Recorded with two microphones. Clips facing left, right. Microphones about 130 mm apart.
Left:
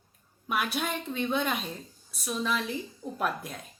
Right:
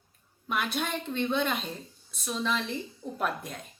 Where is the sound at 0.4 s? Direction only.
5° left (ahead or behind).